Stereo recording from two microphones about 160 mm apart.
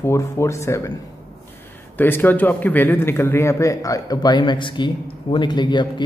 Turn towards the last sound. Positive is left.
turn(degrees=30)  # may be behind; listen again after turning